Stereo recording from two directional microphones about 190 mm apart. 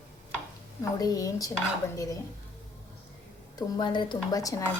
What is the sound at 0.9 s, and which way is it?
Speech, 20° left (ahead or behind).